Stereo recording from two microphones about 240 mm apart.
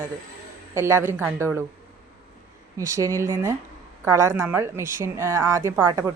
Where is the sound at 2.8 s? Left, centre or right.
Centre.